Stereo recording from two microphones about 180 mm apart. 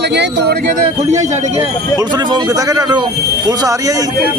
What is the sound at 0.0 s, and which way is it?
Speech, 70° right (ahead or behind).